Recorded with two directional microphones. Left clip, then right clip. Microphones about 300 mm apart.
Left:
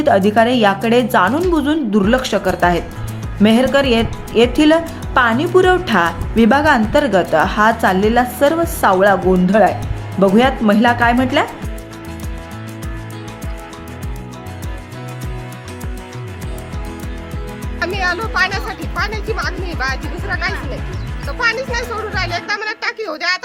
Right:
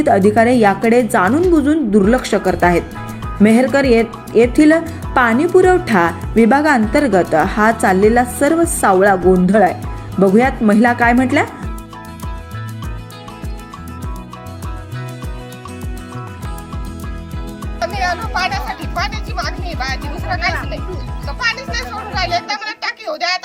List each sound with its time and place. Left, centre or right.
0.0 s speech: centre
18.0 s music: centre
19.1 s music: centre